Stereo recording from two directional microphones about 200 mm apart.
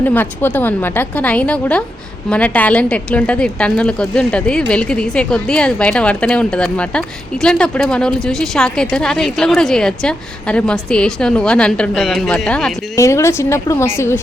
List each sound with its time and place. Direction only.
0.0 s a woman's voice: 10° left (ahead or behind)
13.0 s a woman's voice: 15° left (ahead or behind)